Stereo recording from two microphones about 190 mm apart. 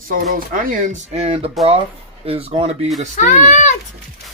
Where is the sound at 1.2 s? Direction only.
30° right (ahead or behind).